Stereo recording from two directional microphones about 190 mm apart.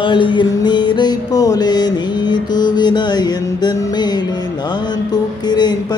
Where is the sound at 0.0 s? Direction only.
25° left (ahead or behind).